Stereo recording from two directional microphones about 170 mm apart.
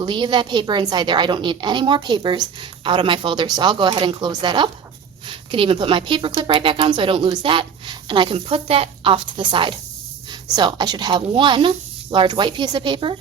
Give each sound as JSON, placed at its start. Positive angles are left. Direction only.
{"t": 0.0, "sound": "a woman's voice", "side_deg": -25}